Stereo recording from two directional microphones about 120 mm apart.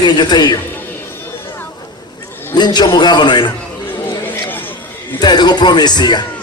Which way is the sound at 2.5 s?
35° left (ahead or behind).